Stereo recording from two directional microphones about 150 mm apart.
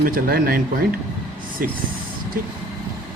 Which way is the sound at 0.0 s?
75° right (ahead or behind).